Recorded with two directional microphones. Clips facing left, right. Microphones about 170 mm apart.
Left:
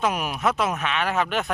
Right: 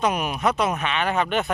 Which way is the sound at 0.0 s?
Centre (ahead or behind).